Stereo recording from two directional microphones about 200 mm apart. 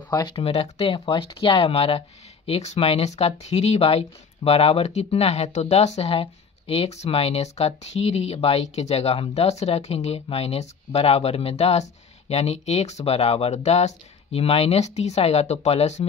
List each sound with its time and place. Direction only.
0.1 s speech: 20° left (ahead or behind)